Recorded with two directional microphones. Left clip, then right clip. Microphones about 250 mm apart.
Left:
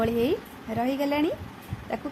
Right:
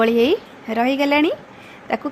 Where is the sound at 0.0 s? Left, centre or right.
Right.